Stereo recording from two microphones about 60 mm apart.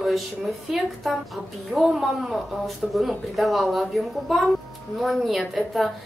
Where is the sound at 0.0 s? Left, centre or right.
Centre.